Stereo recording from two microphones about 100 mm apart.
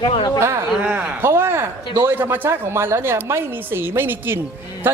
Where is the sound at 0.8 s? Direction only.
15° right (ahead or behind).